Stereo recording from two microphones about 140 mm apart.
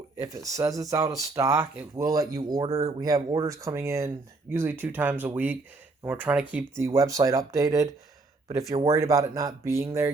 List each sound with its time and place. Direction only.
0.2 s speech: 25° right (ahead or behind)
2.0 s speech: 25° right (ahead or behind)